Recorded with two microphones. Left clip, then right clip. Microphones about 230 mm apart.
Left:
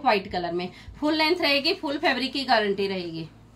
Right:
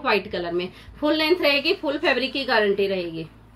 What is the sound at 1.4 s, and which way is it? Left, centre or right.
A woman's voice, left.